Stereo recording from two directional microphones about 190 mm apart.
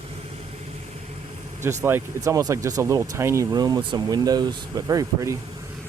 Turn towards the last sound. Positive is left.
turn(degrees=-20)  # may be behind; listen again after turning